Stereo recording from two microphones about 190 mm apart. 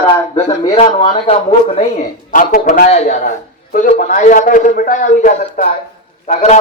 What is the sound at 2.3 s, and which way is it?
A man's voice, 45° left (ahead or behind).